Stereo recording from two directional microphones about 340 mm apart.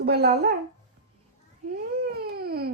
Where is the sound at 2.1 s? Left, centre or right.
Right.